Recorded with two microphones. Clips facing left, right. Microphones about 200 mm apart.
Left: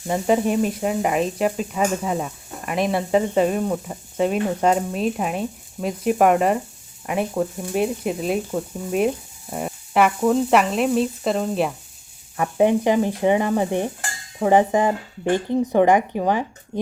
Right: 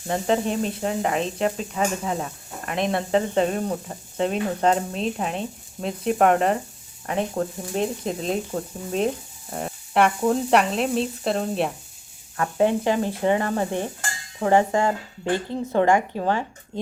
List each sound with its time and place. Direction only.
0.1 s speech: 10° left (ahead or behind)
9.5 s speech: 10° left (ahead or behind)
12.4 s speech: 15° left (ahead or behind)